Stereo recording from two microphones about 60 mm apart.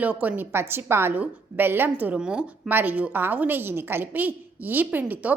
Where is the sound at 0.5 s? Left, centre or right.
Right.